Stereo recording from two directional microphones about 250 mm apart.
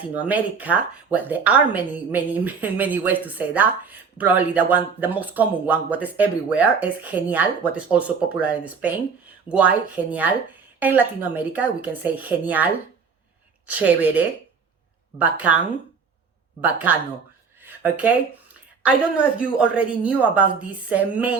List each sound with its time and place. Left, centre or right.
0.0 s a woman's voice: centre
15.2 s a woman's voice: centre
17.6 s a sound: centre
18.8 s speech: centre